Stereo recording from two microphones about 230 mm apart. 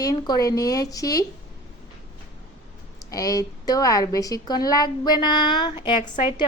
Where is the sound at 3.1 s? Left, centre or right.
Centre.